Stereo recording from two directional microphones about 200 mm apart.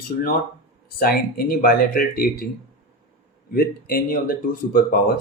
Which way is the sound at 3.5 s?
45° left (ahead or behind).